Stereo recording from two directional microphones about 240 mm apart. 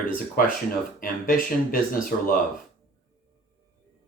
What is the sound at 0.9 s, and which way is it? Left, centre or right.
Speech, left.